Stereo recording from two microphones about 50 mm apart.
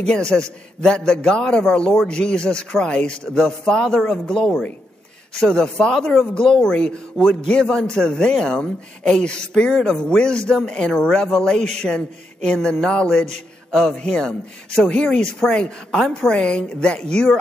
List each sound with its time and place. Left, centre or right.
0.3 s a woman's voice: centre
9.7 s speech: centre
9.9 s a man's voice: centre